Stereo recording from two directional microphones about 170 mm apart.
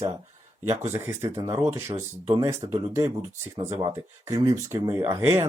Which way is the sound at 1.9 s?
35° right (ahead or behind).